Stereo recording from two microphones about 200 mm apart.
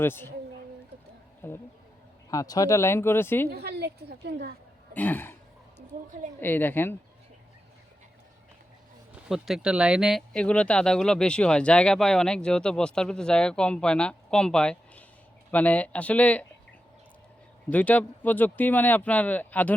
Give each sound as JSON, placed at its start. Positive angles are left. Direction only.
{"t": 0.0, "sound": "speech", "side_deg": 10}
{"t": 1.4, "sound": "speech", "side_deg": 10}
{"t": 3.5, "sound": "a woman's voice", "side_deg": -55}
{"t": 4.9, "sound": "speech", "side_deg": 10}
{"t": 6.4, "sound": "speech", "side_deg": 10}
{"t": 9.3, "sound": "speech", "side_deg": -5}
{"t": 17.7, "sound": "speech", "side_deg": 10}